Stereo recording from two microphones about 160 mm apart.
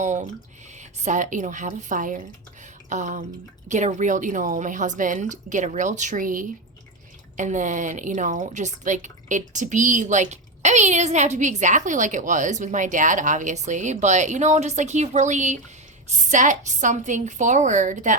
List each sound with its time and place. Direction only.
0.0 s speech: 50° right (ahead or behind)